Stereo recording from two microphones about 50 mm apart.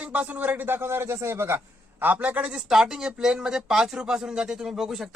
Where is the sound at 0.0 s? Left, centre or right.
Right.